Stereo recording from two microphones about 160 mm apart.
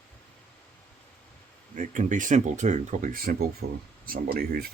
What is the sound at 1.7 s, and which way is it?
Speech, 55° right (ahead or behind).